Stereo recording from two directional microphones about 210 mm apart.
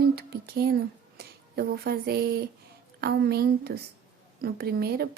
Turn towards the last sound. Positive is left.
turn(degrees=-50)  # may be behind; listen again after turning